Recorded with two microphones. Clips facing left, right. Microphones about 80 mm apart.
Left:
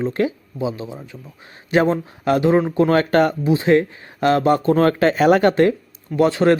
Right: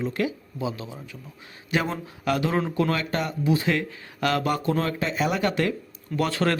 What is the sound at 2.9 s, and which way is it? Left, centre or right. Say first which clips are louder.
Speech: left 12 dB; left.